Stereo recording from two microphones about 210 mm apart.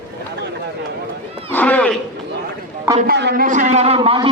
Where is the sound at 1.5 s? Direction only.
5° left (ahead or behind).